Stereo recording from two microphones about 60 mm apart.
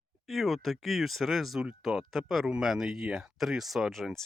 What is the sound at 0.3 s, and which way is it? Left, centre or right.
Speech, centre.